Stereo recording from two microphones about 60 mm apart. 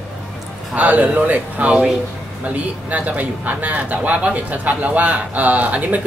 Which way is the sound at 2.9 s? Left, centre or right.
Right.